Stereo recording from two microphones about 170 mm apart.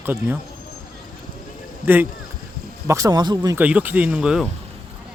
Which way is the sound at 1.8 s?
10° right (ahead or behind).